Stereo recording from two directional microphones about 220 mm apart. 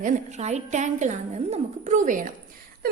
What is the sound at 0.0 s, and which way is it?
A woman's voice, 30° right (ahead or behind).